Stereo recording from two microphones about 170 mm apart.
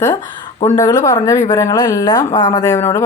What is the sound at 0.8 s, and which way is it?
Speech, 20° left (ahead or behind).